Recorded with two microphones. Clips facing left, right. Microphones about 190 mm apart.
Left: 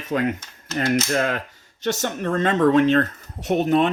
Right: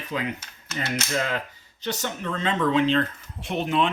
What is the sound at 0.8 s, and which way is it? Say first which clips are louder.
Speech: left 7 dB; 60° left (ahead or behind).